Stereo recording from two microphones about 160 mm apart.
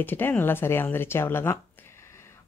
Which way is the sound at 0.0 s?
15° left (ahead or behind).